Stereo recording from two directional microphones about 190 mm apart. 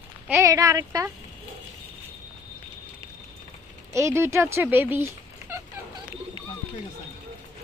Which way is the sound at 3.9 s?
15° right (ahead or behind).